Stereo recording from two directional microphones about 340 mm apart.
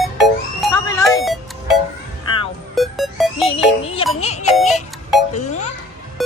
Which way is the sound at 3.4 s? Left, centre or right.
Centre.